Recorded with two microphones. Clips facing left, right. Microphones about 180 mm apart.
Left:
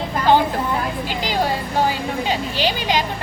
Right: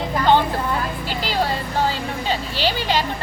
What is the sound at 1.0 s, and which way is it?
Vehicle, 15° left (ahead or behind).